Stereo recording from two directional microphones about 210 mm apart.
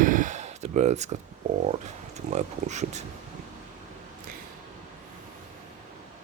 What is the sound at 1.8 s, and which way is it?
Speech, 35° right (ahead or behind).